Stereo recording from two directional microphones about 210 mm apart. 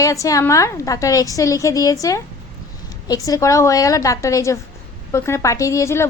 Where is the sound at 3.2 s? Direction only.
15° left (ahead or behind).